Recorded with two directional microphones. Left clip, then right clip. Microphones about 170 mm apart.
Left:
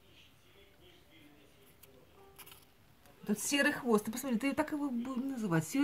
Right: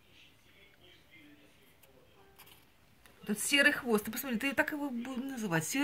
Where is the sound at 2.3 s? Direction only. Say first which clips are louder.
Left 3 dB; 15° left (ahead or behind).